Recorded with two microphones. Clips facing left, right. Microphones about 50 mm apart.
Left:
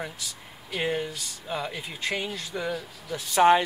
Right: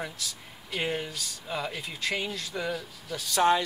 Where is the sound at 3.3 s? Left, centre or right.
Left.